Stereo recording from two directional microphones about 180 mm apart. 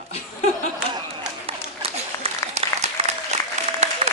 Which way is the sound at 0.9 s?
30° right (ahead or behind).